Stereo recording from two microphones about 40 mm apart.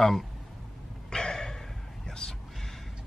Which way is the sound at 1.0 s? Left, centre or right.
Centre.